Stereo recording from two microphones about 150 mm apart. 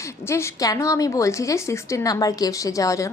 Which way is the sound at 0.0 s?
20° left (ahead or behind).